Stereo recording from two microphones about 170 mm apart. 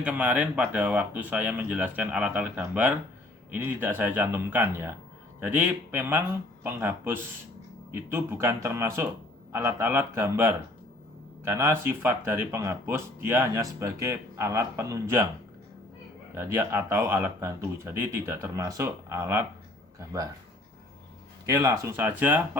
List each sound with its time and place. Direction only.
0.0 s speech: 10° right (ahead or behind)
16.3 s speech: 15° right (ahead or behind)
21.4 s speech: 20° right (ahead or behind)